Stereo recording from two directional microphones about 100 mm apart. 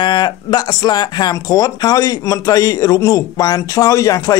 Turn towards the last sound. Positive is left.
turn(degrees=35)  # may be behind; listen again after turning